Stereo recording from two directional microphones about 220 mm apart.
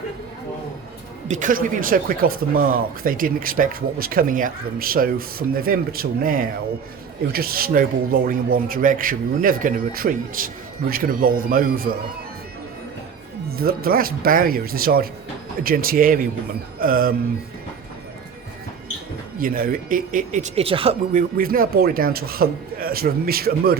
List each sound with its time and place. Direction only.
1.3 s speech: 35° right (ahead or behind)
13.6 s speech: 40° right (ahead or behind)
19.4 s speech: 40° right (ahead or behind); by 20.9 s 25° right (ahead or behind)
21.1 s a man's voice: 40° right (ahead or behind)